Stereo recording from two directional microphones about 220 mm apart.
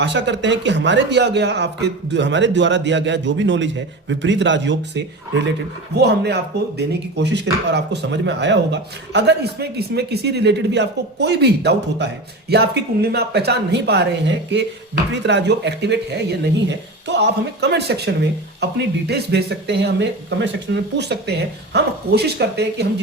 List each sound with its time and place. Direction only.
0.0 s speech: 55° right (ahead or behind)